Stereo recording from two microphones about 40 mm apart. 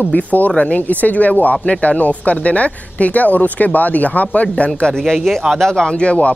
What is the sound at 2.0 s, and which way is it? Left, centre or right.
Speech, left.